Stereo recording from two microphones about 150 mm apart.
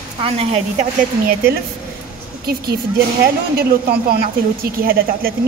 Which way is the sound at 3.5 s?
90° right.